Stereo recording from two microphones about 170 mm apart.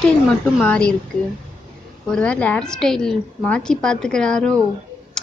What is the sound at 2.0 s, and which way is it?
A woman's voice, 5° left (ahead or behind).